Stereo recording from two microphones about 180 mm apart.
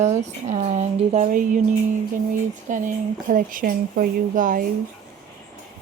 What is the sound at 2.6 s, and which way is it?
Speech, 45° right (ahead or behind).